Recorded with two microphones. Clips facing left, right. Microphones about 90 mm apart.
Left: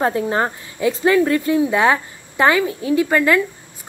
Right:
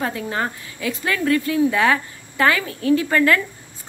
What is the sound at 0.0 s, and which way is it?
A woman's voice, 30° left (ahead or behind).